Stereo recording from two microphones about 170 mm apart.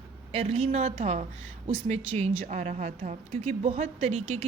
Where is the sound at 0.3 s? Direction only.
35° right (ahead or behind).